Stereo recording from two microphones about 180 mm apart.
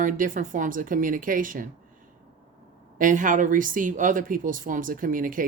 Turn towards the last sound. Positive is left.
turn(degrees=-50)  # may be behind; listen again after turning